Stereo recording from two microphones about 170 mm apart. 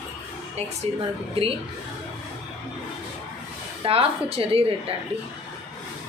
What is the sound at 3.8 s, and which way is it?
Speech, 35° right (ahead or behind).